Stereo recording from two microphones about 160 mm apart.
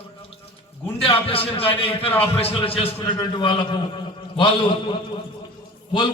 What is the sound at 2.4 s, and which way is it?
A man's voice, 35° left (ahead or behind).